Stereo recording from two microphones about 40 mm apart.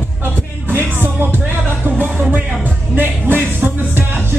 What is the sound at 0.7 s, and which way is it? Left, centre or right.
Music, right.